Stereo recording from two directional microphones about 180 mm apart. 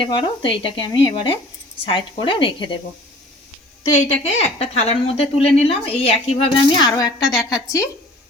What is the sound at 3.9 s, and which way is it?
A woman's voice, 35° left (ahead or behind).